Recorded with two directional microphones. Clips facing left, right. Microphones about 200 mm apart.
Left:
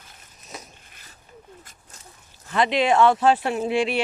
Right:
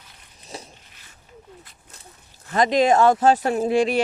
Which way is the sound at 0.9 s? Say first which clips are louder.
Left 2 dB; 50° left (ahead or behind).